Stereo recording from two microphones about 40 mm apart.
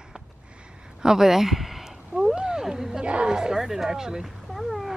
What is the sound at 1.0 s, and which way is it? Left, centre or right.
Speech, centre.